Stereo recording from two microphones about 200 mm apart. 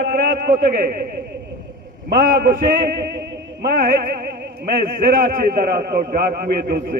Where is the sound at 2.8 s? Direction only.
50° right (ahead or behind).